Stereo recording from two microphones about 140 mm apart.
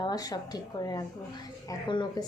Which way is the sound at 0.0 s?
30° left (ahead or behind).